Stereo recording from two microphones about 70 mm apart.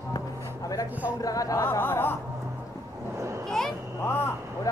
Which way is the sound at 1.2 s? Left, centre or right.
Left.